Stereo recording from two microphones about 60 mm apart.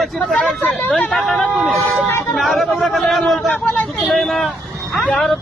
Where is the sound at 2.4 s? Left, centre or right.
Centre.